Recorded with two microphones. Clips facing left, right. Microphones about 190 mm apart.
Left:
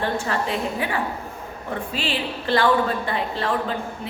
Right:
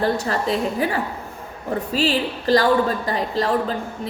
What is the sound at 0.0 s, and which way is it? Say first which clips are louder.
A woman's voice: right 3 dB; 40° right (ahead or behind).